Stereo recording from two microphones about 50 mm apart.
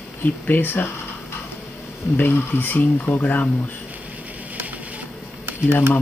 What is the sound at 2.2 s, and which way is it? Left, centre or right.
Speech, left.